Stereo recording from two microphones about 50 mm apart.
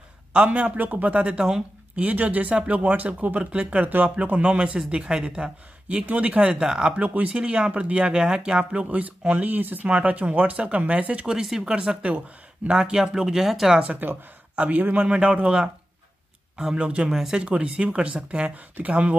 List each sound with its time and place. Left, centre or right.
0.3 s a man's voice: right
4.2 s a man's voice: right
6.6 s speech: centre
7.0 s a man's voice: right
8.2 s a man's voice: centre
9.5 s speech: right
9.8 s a man's voice: right
11.2 s speech: centre
14.0 s speech: right
14.5 s a sound: right
14.8 s a man's voice: right
17.1 s speech: centre
17.4 s a man's voice: right